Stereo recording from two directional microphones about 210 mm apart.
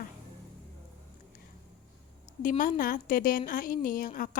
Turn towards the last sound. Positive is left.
turn(degrees=40)  # may be behind; listen again after turning